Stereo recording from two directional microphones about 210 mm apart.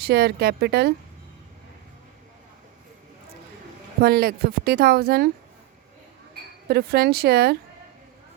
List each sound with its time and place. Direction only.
0.0 s a woman's voice: 50° right (ahead or behind)
4.0 s a woman's voice: 45° right (ahead or behind)
6.7 s a woman's voice: 50° right (ahead or behind)